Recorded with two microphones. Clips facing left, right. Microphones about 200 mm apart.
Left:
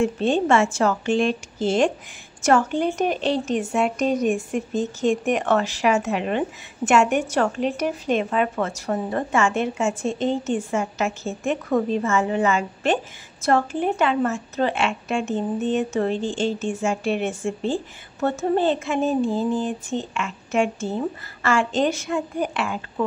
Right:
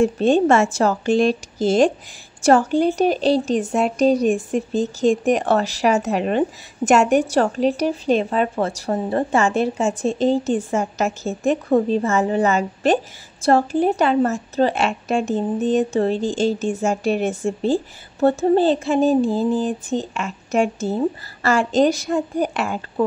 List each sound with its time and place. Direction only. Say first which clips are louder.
0.0 s a woman's voice: right 5 dB; 40° right (ahead or behind)